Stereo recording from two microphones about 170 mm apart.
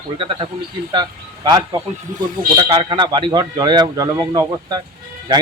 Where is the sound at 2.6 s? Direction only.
30° right (ahead or behind).